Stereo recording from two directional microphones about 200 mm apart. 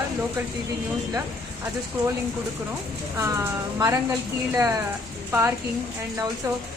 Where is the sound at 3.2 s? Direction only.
15° right (ahead or behind).